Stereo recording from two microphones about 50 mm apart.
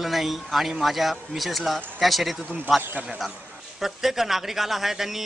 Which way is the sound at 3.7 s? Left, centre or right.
Centre.